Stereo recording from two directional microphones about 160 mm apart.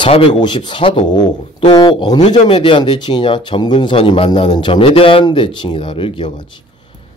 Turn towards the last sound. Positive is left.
turn(degrees=30)  # may be behind; listen again after turning